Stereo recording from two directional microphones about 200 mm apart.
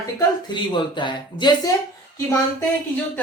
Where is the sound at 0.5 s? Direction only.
25° left (ahead or behind).